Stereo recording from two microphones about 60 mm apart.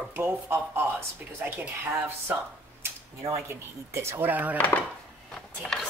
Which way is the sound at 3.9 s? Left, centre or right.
Right.